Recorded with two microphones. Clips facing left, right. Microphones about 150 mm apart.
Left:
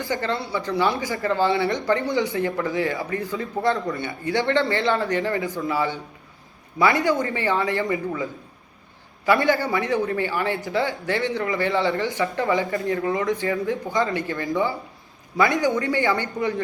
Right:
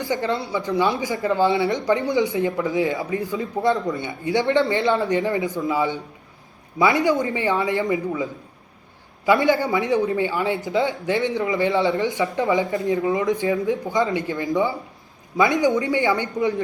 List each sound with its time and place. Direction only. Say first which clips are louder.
0.0 s a man's voice: right 2 dB; 20° right (ahead or behind)